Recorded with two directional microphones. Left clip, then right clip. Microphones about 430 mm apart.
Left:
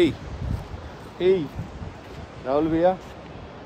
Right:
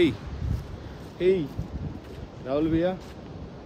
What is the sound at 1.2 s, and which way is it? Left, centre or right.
Speech, centre.